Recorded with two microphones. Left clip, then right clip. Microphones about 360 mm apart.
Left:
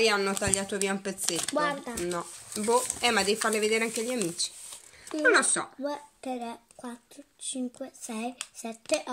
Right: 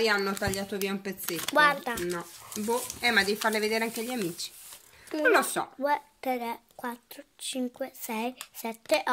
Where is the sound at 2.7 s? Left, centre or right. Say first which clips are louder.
Left 1 dB; centre.